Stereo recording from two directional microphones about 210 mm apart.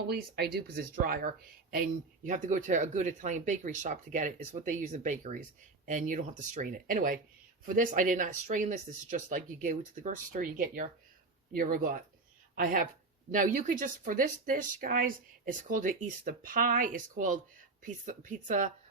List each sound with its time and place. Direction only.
0.1 s a woman's voice: 50° right (ahead or behind)